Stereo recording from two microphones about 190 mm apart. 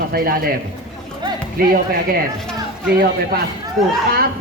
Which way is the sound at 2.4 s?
Centre (ahead or behind).